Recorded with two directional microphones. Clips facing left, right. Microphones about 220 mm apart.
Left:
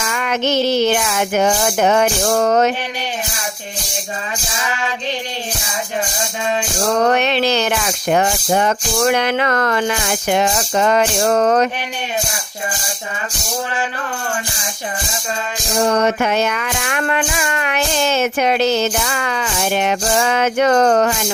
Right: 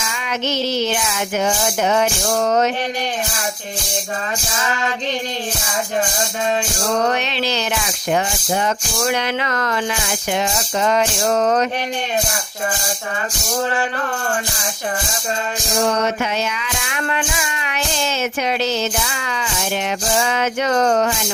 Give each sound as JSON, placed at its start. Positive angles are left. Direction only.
{"t": 0.0, "sound": "female singing", "side_deg": 55}
{"t": 1.6, "sound": "music", "side_deg": 55}
{"t": 7.0, "sound": "music", "side_deg": 55}
{"t": 16.0, "sound": "music", "side_deg": 55}